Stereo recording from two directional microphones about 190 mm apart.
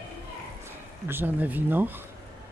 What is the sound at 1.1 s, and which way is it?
Speech, 10° right (ahead or behind).